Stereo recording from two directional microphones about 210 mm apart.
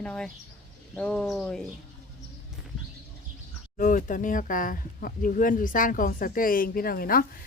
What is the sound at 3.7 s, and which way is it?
Speech, 40° left (ahead or behind).